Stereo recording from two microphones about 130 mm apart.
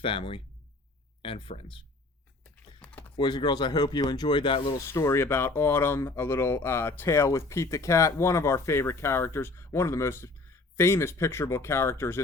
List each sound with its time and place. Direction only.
0.0 s speech: 45° left (ahead or behind)
3.2 s speech: 35° left (ahead or behind)
4.9 s speech: 20° left (ahead or behind)